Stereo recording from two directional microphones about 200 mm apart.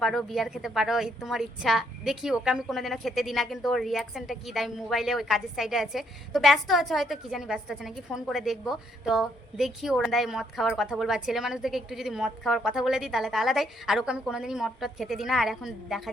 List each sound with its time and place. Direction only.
0.0 s a woman's voice: centre (ahead or behind)